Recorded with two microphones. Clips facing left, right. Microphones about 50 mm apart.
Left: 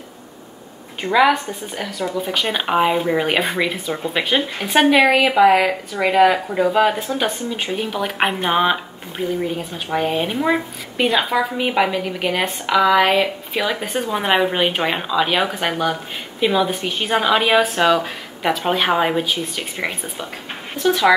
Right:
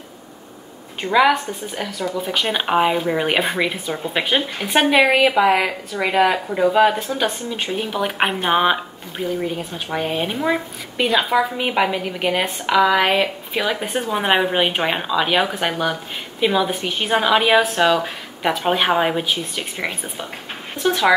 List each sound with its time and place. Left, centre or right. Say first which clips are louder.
1.1 s speech: even; centre
20.7 s speech: left 2 dB; centre